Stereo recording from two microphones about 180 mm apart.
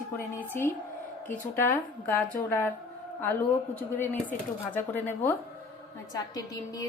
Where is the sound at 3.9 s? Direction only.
10° left (ahead or behind).